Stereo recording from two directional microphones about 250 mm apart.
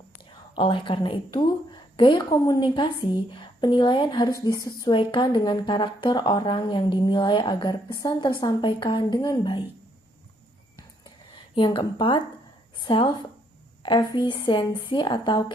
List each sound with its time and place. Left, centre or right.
0.5 s a woman's voice: centre
11.5 s a woman's voice: centre